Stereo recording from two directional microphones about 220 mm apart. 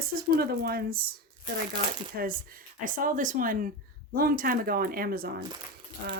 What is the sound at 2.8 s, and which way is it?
Speech, 40° right (ahead or behind).